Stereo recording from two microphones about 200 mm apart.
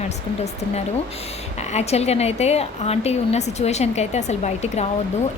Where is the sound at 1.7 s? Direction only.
30° left (ahead or behind).